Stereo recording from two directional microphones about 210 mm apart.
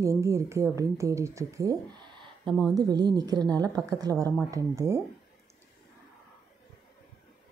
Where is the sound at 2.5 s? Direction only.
Centre (ahead or behind).